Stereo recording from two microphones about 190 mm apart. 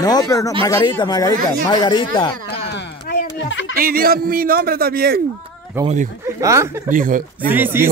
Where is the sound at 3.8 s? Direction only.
50° right (ahead or behind).